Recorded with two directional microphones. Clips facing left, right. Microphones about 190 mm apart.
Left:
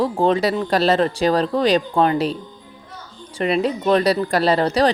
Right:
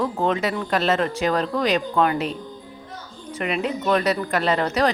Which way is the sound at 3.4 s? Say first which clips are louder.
Left 5 dB; 35° left (ahead or behind).